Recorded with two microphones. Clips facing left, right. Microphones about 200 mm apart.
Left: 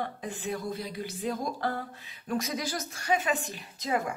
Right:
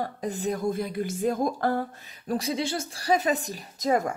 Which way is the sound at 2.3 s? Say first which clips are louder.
Right 4 dB; 30° right (ahead or behind).